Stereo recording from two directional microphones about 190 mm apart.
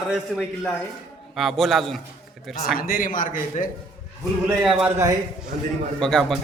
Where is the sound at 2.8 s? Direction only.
50° left (ahead or behind).